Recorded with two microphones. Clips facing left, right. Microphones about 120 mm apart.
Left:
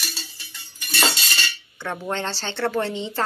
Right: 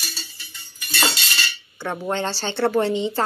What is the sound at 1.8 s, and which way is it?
A woman's voice, 10° right (ahead or behind).